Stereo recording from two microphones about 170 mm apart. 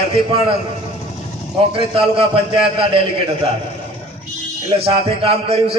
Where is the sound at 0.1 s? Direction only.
30° right (ahead or behind).